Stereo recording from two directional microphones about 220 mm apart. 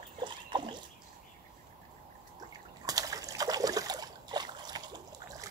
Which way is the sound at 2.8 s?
15° right (ahead or behind).